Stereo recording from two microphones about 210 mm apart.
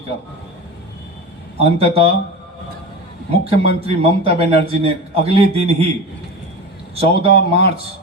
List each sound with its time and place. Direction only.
1.5 s a man's voice: 30° right (ahead or behind)
3.5 s a man's voice: 30° right (ahead or behind)
6.9 s a man's voice: 25° right (ahead or behind)